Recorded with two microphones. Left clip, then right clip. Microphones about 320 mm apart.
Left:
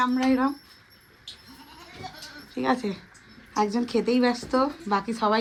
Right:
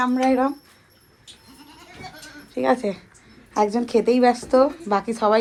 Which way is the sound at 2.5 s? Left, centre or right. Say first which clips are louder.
Right 6 dB; centre.